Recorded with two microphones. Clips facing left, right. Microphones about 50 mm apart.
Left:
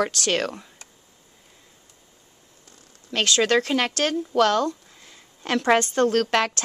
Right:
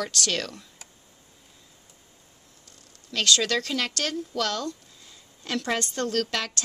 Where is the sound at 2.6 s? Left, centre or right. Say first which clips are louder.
Left 5 dB; left.